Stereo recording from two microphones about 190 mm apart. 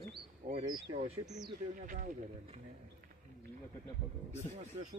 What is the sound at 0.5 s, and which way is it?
Speech, 25° right (ahead or behind).